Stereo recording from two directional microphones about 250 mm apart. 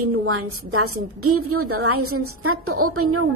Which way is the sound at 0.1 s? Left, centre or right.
Right.